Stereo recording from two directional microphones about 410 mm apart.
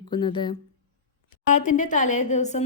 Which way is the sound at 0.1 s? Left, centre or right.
Centre.